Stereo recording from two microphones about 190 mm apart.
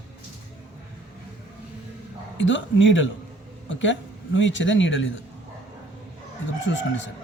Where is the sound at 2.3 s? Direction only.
75° left (ahead or behind).